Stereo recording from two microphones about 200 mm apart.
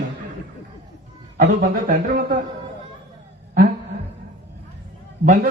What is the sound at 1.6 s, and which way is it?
Speech, 50° right (ahead or behind).